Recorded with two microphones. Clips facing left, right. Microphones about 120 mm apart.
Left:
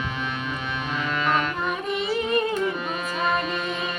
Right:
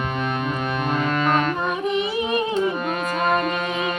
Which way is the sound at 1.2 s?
45° right (ahead or behind).